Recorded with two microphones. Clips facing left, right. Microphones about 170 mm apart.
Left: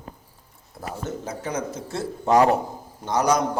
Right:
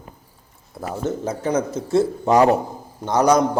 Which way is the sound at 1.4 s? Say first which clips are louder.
Right 8 dB; 30° right (ahead or behind).